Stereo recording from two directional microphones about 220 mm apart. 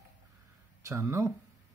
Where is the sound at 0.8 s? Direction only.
15° right (ahead or behind).